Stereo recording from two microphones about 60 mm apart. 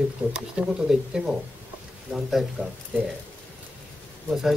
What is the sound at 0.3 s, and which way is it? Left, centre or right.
A man's voice, centre.